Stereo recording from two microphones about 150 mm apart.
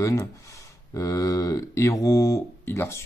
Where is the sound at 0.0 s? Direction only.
20° left (ahead or behind).